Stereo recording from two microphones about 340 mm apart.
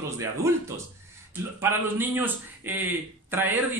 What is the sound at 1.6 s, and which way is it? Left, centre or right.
A man's voice, centre.